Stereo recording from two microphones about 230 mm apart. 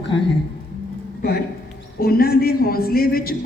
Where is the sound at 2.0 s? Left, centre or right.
Left.